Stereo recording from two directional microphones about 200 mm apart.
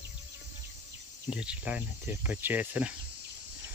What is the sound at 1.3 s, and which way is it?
Speech, 5° right (ahead or behind).